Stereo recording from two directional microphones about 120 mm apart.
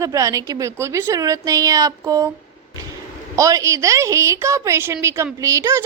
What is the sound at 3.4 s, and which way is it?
A woman's voice, 25° right (ahead or behind).